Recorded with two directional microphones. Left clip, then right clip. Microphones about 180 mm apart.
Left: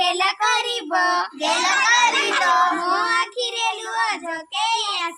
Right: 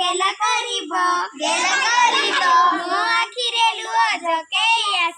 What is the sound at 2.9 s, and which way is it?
Child singing, 75° left (ahead or behind).